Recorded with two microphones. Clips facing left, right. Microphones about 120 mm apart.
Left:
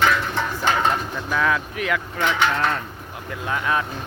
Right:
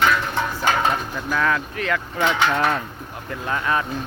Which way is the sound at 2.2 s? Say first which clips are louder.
Right 2 dB; 15° right (ahead or behind).